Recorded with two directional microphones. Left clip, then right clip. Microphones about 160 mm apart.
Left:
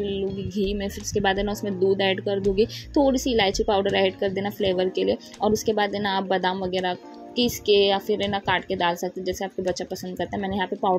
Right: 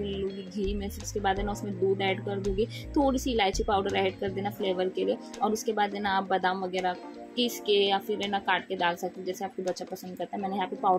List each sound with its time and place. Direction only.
0.0 s speech: 25° left (ahead or behind)